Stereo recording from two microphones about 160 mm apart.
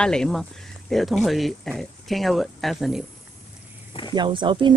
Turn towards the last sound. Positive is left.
turn(degrees=-30)  # may be behind; listen again after turning